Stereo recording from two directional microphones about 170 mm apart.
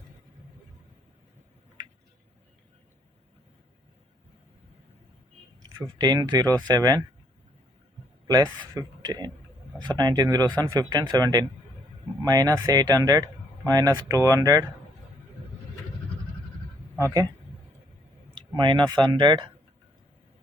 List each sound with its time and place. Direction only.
5.8 s speech: 20° right (ahead or behind)
8.3 s speech: 20° right (ahead or behind)
18.3 s speech: 25° right (ahead or behind)